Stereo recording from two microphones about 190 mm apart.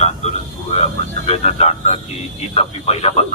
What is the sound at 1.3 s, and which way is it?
Speech, 30° left (ahead or behind).